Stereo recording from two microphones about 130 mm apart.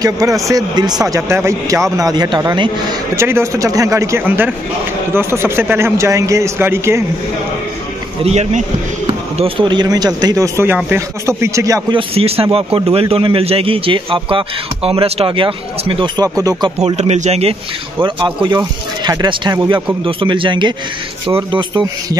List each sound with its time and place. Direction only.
0.0 s speech: 25° right (ahead or behind)
3.2 s speech: 20° right (ahead or behind)
8.2 s speech: 60° right (ahead or behind)
9.0 s speech: 40° right (ahead or behind)
11.9 s a man's voice: 45° right (ahead or behind)
16.8 s speech: 55° right (ahead or behind)
18.0 s speech: 35° right (ahead or behind)